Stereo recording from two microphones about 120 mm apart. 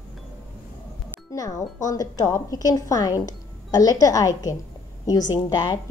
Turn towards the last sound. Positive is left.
turn(degrees=30)  # may be behind; listen again after turning